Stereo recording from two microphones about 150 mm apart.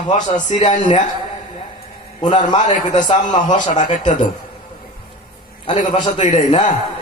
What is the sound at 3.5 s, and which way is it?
Speech, 55° left (ahead or behind).